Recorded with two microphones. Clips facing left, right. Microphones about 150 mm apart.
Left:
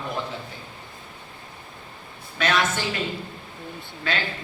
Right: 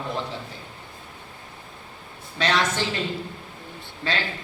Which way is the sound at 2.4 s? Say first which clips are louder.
Even; 30° right (ahead or behind).